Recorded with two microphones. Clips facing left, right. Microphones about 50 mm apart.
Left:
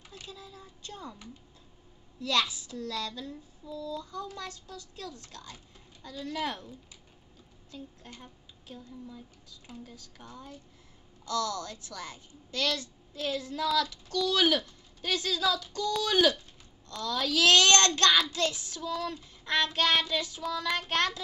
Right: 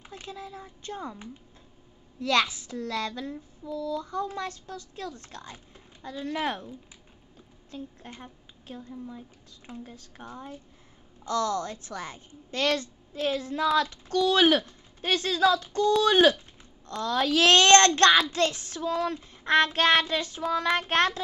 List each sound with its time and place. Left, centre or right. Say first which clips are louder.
0.1 s a woman's voice: right 7 dB; right
2.2 s child singing: right 4 dB; right
7.7 s a woman's voice: right 5 dB; right
9.7 s child singing: right 5 dB; right
16.0 s a child's voice: right 4 dB; right
18.3 s child singing: right 5 dB; right